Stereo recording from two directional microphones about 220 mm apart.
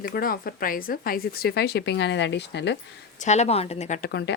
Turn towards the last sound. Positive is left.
turn(degrees=45)  # may be behind; listen again after turning